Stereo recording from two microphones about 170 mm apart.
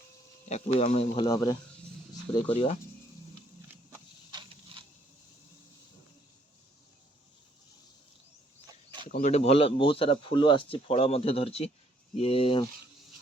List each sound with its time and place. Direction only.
0.4 s speech: 40° left (ahead or behind)
1.3 s speech: 20° left (ahead or behind)
2.5 s speech: 35° left (ahead or behind)
3.9 s a sound: 25° right (ahead or behind)
9.2 s speech: 40° left (ahead or behind)